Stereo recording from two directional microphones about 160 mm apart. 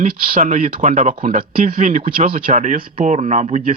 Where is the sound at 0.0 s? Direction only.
55° right (ahead or behind).